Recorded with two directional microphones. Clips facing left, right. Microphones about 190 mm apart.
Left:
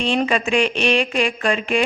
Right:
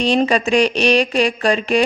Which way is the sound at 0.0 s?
35° right (ahead or behind).